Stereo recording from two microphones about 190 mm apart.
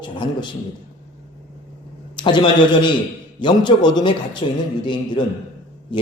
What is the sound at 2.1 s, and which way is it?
A man's voice, 25° left (ahead or behind).